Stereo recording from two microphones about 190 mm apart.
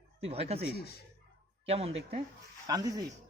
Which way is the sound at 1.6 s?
30° right (ahead or behind).